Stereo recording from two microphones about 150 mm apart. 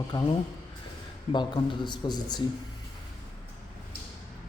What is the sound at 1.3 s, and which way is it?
A man's voice, 30° left (ahead or behind).